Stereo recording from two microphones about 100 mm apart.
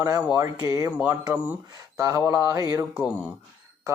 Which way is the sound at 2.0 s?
35° right (ahead or behind).